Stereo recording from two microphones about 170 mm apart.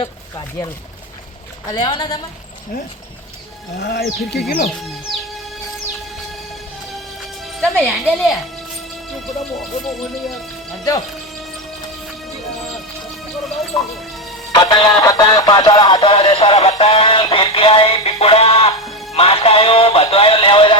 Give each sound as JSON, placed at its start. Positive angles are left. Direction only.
{"t": 0.0, "sound": "speech", "side_deg": 25}
{"t": 3.8, "sound": "speech", "side_deg": 80}
{"t": 6.9, "sound": "music", "side_deg": 0}
{"t": 9.6, "sound": "speech", "side_deg": 0}
{"t": 14.5, "sound": "music", "side_deg": 30}
{"t": 18.9, "sound": "music", "side_deg": 0}
{"t": 19.1, "sound": "music", "side_deg": 35}